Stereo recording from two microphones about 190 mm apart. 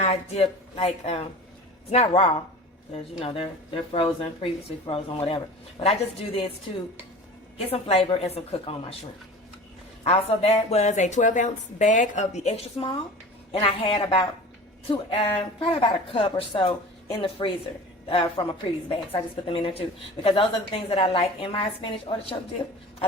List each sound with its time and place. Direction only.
0.0 s a woman's voice: 35° left (ahead or behind)
7.7 s a woman's voice: 30° left (ahead or behind)
10.0 s a woman's voice: 30° left (ahead or behind)